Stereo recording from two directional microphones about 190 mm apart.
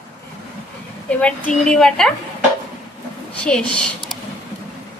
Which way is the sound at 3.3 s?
5° left (ahead or behind).